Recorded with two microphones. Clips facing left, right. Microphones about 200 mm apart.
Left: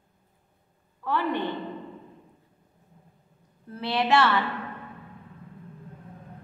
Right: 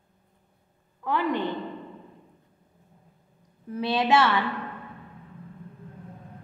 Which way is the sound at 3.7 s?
15° right (ahead or behind).